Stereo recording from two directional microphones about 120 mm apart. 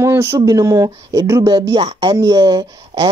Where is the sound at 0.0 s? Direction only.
20° right (ahead or behind).